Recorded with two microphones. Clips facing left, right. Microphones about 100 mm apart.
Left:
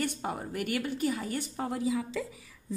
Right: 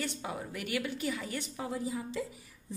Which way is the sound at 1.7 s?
90° left.